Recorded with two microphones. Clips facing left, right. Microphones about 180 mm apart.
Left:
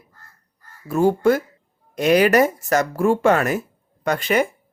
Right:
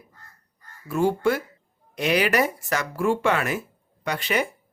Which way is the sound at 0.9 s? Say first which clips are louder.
Left 5 dB; 40° left (ahead or behind).